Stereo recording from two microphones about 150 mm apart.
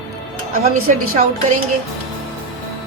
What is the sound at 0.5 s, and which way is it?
A woman's voice, 70° right (ahead or behind).